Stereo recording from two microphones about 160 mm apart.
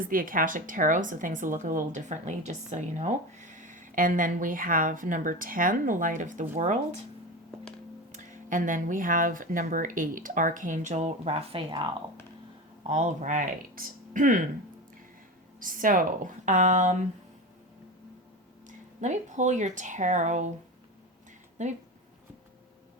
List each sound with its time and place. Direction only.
0.0 s speech: 60° right (ahead or behind)
8.1 s speech: 50° right (ahead or behind); by 11.9 s 35° right (ahead or behind)
12.9 s speech: 45° right (ahead or behind)
15.6 s speech: 60° right (ahead or behind)
19.0 s speech: 50° right (ahead or behind)
21.6 s speech: 50° right (ahead or behind)